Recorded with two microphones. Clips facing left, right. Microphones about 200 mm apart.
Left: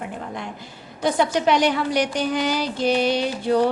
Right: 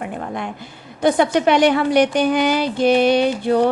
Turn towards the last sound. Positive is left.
turn(degrees=-60)  # may be behind; listen again after turning